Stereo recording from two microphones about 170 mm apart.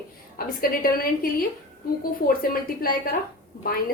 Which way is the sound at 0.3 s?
60° left (ahead or behind).